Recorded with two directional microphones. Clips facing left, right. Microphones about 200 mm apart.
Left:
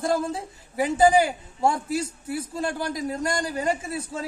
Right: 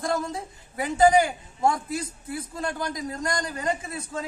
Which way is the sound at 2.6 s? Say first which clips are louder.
Even; 10° left (ahead or behind).